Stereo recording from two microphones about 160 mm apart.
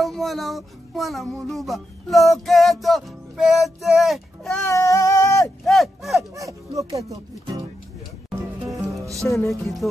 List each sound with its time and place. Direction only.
0.0 s music: centre (ahead or behind)
4.6 s a sound: 20° left (ahead or behind)
5.7 s music: centre (ahead or behind)
6.3 s speech: 20° right (ahead or behind)
8.7 s music: 20° right (ahead or behind)
9.5 s music: centre (ahead or behind)